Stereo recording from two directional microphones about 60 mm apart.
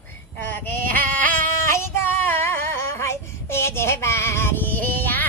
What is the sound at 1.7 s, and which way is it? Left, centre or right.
Female singing, left.